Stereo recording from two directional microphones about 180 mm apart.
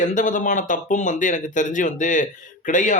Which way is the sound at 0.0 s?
45° left (ahead or behind).